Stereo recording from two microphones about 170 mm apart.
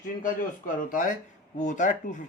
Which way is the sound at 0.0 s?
55° left (ahead or behind).